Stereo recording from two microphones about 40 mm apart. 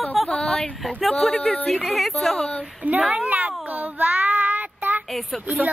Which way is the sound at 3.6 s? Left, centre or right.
Right.